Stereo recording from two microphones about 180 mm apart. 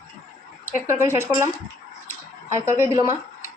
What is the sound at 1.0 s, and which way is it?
Speech, 15° right (ahead or behind).